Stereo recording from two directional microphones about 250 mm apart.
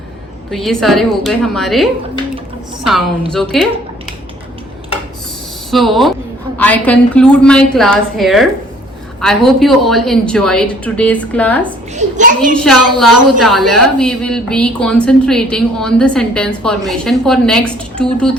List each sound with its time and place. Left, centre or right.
0.5 s a woman's voice: centre
5.7 s a woman's voice: centre
11.9 s a child's voice: right
13.0 s a woman's voice: centre